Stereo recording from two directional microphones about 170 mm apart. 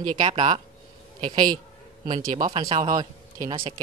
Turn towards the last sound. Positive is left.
turn(degrees=-25)  # may be behind; listen again after turning